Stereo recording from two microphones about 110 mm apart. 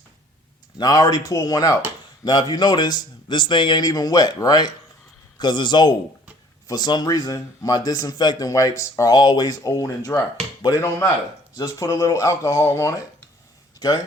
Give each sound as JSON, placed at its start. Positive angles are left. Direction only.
{"t": 0.8, "sound": "a man's voice", "side_deg": 35}
{"t": 13.7, "sound": "speech", "side_deg": 35}